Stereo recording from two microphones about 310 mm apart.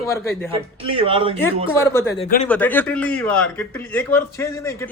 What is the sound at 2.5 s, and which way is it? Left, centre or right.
A man's voice, centre.